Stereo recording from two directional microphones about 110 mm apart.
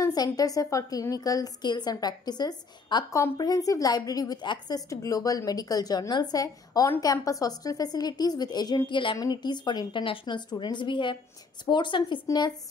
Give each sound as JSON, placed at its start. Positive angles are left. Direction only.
{"t": 0.0, "sound": "a woman's voice", "side_deg": 35}